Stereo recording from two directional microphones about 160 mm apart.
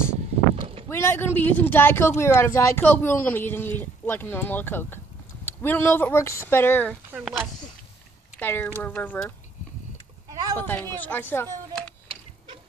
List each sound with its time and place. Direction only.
0.8 s speech: 15° left (ahead or behind)
7.1 s speech: 10° right (ahead or behind)
8.4 s speech: 15° left (ahead or behind)
10.3 s a sound: 20° right (ahead or behind)
10.6 s speech: 10° left (ahead or behind)